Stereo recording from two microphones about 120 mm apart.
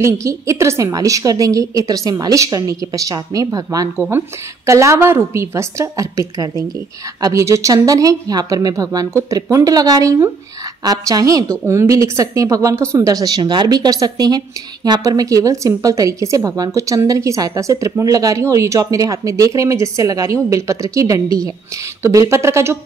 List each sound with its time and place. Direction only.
0.0 s a woman's voice: 25° right (ahead or behind)